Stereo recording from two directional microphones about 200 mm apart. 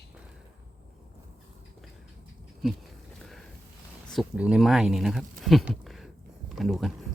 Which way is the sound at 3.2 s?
Centre (ahead or behind).